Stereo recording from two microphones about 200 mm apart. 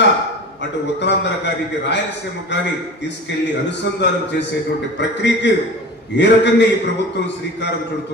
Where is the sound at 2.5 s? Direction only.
60° left (ahead or behind).